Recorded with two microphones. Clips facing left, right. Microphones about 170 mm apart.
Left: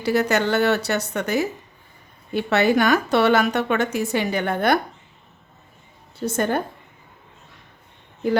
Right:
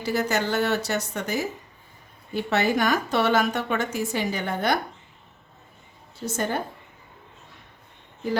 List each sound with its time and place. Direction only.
0.0 s a woman's voice: 65° left (ahead or behind)
6.2 s a woman's voice: 60° left (ahead or behind)